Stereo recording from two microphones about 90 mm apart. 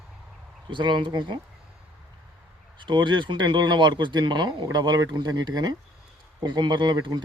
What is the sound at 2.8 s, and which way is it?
Speech, 60° right (ahead or behind).